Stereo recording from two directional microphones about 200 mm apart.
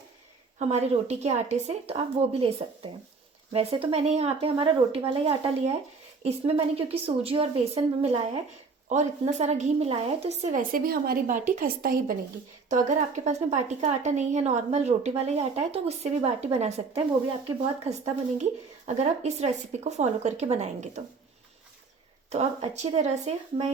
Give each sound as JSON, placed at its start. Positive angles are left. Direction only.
{"t": 0.7, "sound": "a woman's voice", "side_deg": -35}
{"t": 22.3, "sound": "a woman's voice", "side_deg": -30}